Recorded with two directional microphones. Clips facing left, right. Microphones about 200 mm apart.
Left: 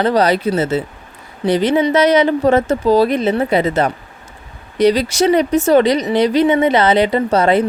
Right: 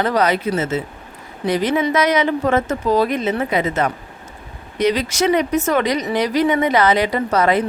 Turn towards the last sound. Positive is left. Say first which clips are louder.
# left 4 dB
turn(degrees=30)  # may be behind; listen again after turning